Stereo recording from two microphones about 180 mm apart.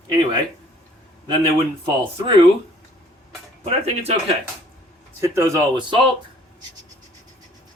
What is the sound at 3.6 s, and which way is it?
Speech, 35° right (ahead or behind).